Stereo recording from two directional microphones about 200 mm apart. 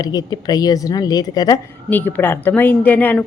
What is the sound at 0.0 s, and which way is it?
A woman's voice, 20° left (ahead or behind).